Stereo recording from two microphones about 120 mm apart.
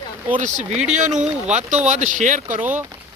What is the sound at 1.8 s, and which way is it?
Speech, 90° right.